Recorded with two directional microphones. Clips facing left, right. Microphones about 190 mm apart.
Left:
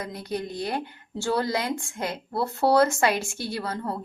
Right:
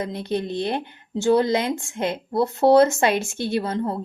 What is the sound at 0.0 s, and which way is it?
Speech, 25° right (ahead or behind).